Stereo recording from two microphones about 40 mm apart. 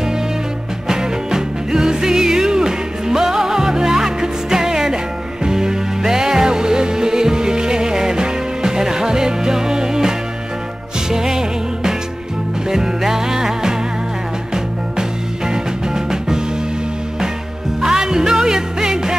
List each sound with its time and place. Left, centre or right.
0.8 s music: centre
17.8 s music: centre